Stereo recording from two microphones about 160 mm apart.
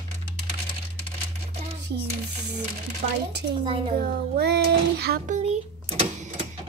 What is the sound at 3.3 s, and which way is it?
A woman's voice, 90° right.